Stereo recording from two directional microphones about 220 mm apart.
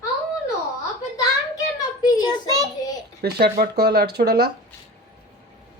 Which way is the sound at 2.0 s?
20° left (ahead or behind).